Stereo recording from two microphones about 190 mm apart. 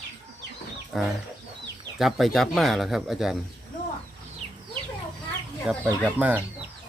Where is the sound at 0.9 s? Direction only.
Centre (ahead or behind).